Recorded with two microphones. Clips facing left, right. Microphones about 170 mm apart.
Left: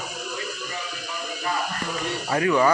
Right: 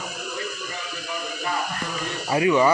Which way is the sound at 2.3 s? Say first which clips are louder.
Right 3 dB; 10° right (ahead or behind).